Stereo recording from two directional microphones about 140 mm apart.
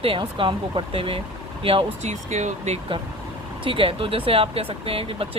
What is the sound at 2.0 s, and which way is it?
Speech, 55° right (ahead or behind).